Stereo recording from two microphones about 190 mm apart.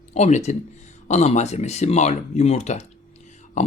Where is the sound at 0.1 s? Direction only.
35° left (ahead or behind).